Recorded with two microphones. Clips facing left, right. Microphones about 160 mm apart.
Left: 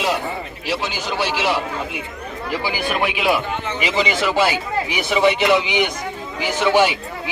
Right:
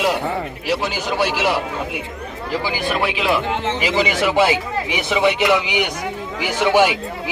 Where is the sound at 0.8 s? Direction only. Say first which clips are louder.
Right 3 dB; 10° right (ahead or behind).